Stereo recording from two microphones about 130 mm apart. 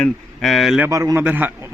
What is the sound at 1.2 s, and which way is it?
Speech, 15° right (ahead or behind).